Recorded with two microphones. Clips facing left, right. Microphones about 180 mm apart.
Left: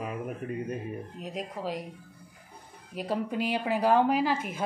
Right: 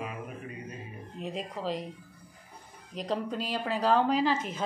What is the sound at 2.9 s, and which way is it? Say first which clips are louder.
Speech: left 2 dB; 5° left (ahead or behind).